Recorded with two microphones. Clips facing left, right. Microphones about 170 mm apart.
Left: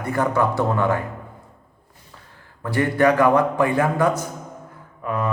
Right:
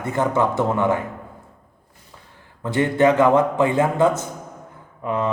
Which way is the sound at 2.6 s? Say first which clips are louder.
Right 1 dB; 20° right (ahead or behind).